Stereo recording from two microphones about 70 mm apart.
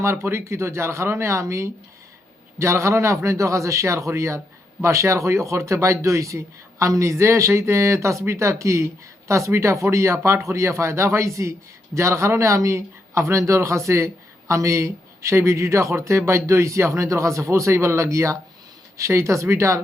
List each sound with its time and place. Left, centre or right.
0.0 s speech: right